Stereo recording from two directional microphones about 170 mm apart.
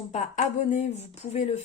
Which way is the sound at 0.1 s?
45° left (ahead or behind).